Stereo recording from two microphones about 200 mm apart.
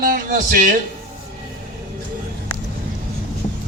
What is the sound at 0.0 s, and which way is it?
Speech, 45° right (ahead or behind).